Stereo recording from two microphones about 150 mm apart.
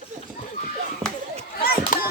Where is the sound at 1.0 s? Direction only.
40° right (ahead or behind).